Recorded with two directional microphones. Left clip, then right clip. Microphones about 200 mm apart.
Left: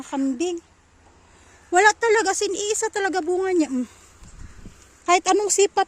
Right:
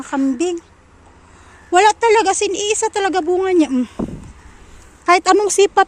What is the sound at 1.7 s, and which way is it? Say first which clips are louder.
Speech: right 5 dB; 25° left (ahead or behind).